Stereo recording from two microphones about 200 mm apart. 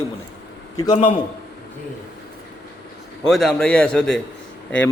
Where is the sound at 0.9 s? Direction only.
30° left (ahead or behind).